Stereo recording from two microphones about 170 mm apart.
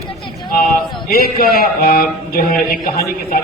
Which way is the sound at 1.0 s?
60° left (ahead or behind).